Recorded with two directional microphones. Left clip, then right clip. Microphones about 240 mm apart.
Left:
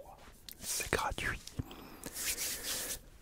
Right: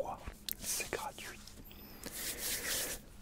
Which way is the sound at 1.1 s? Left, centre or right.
Left.